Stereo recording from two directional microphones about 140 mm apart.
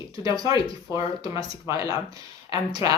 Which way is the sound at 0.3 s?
25° right (ahead or behind).